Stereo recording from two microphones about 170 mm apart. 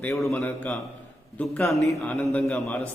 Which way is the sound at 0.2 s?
Centre (ahead or behind).